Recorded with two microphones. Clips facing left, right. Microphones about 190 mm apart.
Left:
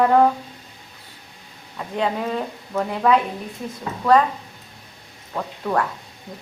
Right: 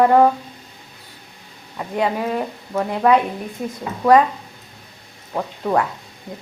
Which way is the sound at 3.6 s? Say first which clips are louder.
Right 6 dB; 60° right (ahead or behind).